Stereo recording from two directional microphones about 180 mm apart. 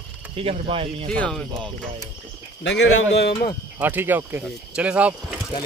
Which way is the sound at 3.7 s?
10° right (ahead or behind).